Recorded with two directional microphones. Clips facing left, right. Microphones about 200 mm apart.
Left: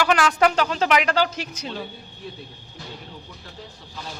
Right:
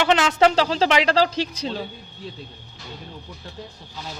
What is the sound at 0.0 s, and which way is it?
Speech, 25° right (ahead or behind).